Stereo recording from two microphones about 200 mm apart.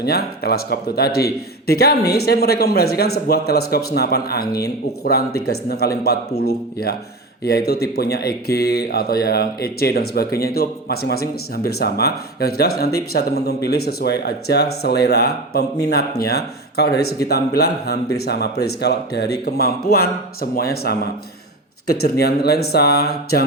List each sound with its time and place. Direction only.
0.0 s speech: 55° left (ahead or behind)
22.2 s speech: 55° left (ahead or behind)